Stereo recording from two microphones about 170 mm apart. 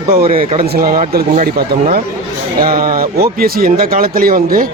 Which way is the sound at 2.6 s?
60° right (ahead or behind).